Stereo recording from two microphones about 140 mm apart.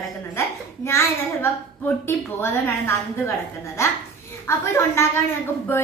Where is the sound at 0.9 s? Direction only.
20° left (ahead or behind).